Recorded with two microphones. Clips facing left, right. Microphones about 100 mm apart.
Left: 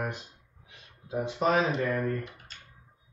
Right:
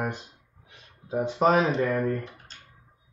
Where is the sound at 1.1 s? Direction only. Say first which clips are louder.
Right 5 dB; 30° right (ahead or behind).